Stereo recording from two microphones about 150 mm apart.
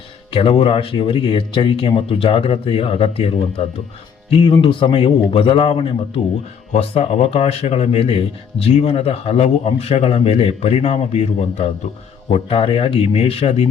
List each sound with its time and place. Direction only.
0.3 s speech: 40° left (ahead or behind)